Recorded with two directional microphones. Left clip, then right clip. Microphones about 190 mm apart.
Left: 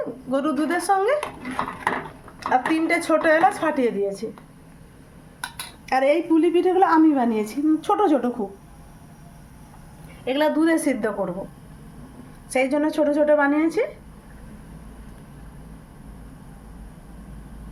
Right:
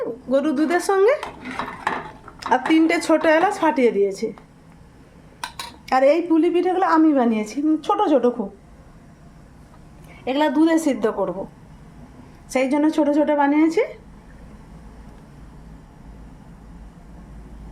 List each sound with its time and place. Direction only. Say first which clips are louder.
0.3 s a woman's voice: right 4 dB; 25° right (ahead or behind)
2.4 s a woman's voice: right 3 dB; 25° right (ahead or behind)
5.9 s a woman's voice: right 3 dB; 20° right (ahead or behind); by 8.3 s centre (ahead or behind)
10.2 s a woman's voice: right 2 dB; 10° right (ahead or behind)
12.5 s a woman's voice: right 2 dB; 15° right (ahead or behind)